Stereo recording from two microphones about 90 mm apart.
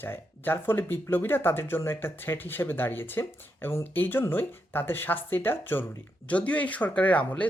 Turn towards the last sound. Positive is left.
turn(degrees=15)  # may be behind; listen again after turning